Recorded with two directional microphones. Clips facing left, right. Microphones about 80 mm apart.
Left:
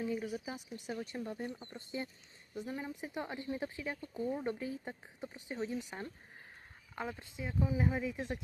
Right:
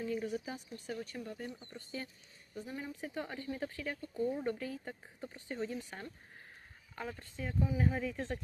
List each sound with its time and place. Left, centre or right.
0.0 s speech: centre